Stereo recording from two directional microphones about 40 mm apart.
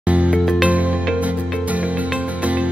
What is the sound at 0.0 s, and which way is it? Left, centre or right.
Music, right.